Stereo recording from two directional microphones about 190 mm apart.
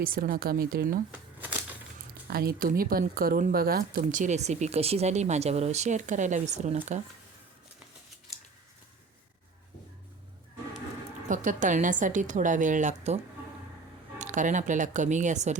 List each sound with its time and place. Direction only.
0.0 s a woman's voice: 50° right (ahead or behind)
2.2 s speech: 55° right (ahead or behind); by 6.7 s 35° right (ahead or behind)
11.3 s speech: 40° right (ahead or behind)
14.2 s speech: 40° right (ahead or behind)